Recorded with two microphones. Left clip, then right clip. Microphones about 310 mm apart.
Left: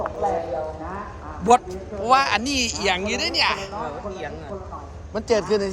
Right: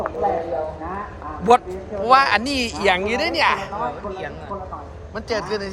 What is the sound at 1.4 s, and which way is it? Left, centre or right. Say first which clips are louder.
A woman's voice: right 2 dB; centre.